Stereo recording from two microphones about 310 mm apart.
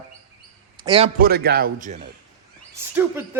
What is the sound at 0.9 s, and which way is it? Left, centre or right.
A man's voice, centre.